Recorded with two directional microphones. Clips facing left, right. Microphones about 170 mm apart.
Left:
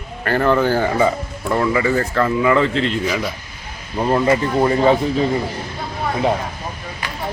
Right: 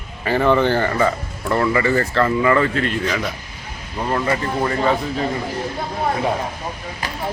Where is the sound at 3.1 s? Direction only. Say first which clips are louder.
Left 1 dB; 10° left (ahead or behind); by 4.9 s 25° left (ahead or behind).